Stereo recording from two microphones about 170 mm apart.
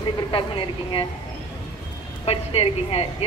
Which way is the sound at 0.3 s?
30° left (ahead or behind).